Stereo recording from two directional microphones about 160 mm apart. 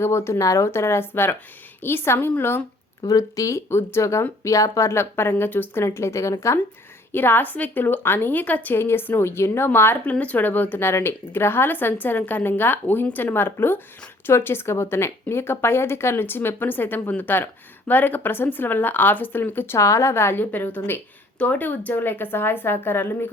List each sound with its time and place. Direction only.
0.0 s speech: 15° left (ahead or behind)
3.0 s speech: 20° left (ahead or behind)